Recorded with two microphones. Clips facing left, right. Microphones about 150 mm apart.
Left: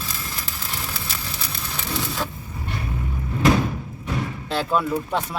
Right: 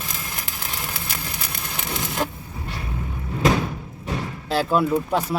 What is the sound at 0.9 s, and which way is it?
Vehicle, 55° right (ahead or behind).